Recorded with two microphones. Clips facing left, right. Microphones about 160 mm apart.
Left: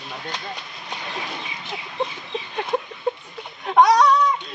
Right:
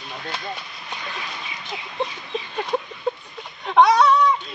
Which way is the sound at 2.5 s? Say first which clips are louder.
Left 1 dB; centre (ahead or behind).